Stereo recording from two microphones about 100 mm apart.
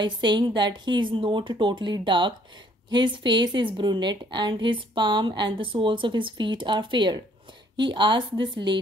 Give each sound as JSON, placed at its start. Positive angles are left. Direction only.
{"t": 0.2, "sound": "a woman's voice", "side_deg": -50}